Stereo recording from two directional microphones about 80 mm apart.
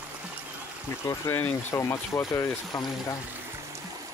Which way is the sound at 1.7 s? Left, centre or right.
Left.